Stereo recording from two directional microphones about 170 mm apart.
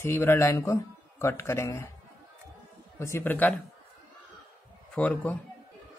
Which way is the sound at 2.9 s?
15° left (ahead or behind).